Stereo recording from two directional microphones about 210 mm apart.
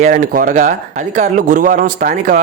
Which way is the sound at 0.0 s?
40° right (ahead or behind).